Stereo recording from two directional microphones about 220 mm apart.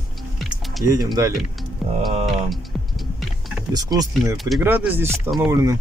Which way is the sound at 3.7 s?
15° right (ahead or behind).